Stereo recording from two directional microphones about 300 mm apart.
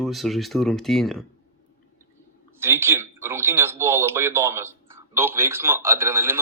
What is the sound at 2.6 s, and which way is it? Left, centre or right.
A man's voice, centre.